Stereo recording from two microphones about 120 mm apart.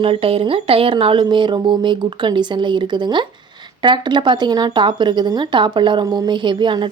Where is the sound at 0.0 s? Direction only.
50° right (ahead or behind).